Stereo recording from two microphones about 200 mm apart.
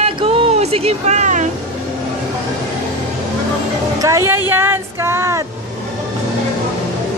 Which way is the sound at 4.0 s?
15° right (ahead or behind).